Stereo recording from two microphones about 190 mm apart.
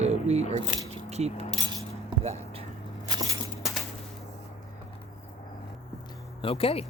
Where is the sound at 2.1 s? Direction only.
30° right (ahead or behind).